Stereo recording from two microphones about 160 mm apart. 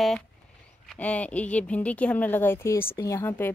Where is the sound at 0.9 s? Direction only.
10° left (ahead or behind).